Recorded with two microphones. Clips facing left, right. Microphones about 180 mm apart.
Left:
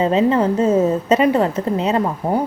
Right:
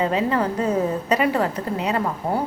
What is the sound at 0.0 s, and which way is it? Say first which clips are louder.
A woman's voice: left 6 dB; 25° left (ahead or behind).